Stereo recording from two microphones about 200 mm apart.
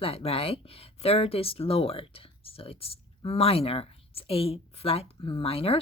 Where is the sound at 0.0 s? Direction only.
30° left (ahead or behind).